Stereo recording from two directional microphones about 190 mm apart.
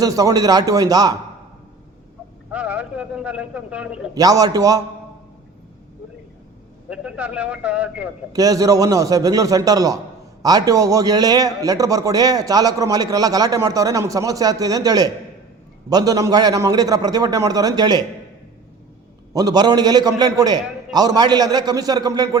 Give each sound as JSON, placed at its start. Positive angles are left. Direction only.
{"t": 0.0, "sound": "a man's voice", "side_deg": -20}
{"t": 2.5, "sound": "a man's voice", "side_deg": -5}
{"t": 4.1, "sound": "a man's voice", "side_deg": -20}
{"t": 6.9, "sound": "speech", "side_deg": -5}
{"t": 8.3, "sound": "a man's voice", "side_deg": -20}
{"t": 19.3, "sound": "a man's voice", "side_deg": -20}